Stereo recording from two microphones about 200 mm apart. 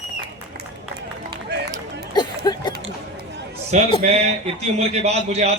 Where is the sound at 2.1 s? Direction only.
20° left (ahead or behind).